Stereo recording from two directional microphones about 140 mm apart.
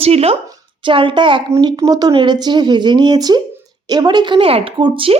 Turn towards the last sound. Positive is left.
turn(degrees=-40)  # may be behind; listen again after turning